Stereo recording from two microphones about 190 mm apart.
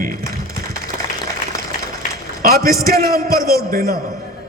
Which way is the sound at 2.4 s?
50° right (ahead or behind).